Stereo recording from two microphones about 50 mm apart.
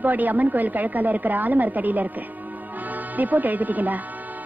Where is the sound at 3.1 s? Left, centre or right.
Right.